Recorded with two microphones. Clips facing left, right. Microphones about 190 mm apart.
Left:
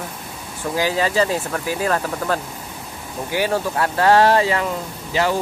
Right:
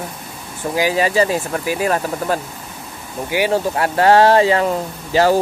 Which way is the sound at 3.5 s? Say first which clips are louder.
Right 3 dB; 30° right (ahead or behind).